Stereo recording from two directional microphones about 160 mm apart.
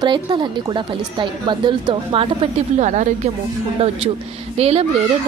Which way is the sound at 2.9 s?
50° right (ahead or behind).